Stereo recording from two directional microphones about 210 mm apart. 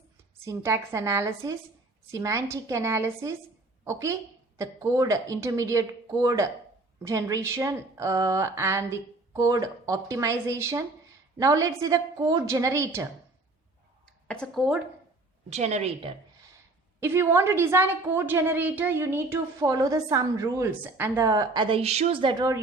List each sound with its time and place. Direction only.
0.3 s a woman's voice: 15° right (ahead or behind)
14.0 s a sound: 5° left (ahead or behind)
15.4 s a woman's voice: 30° right (ahead or behind)
17.0 s a woman's voice: 10° right (ahead or behind)